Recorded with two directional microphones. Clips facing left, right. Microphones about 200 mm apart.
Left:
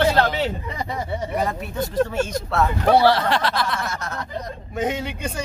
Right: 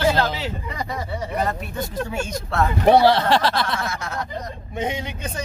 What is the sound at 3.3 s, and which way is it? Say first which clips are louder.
Speech: right 2 dB; 30° right (ahead or behind).